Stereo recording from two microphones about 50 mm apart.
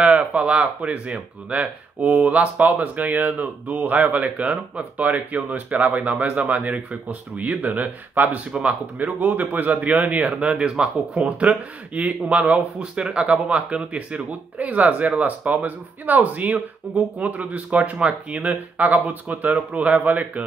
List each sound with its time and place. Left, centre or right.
0.0 s speech: right
8.5 s speech: centre
8.9 s speech: right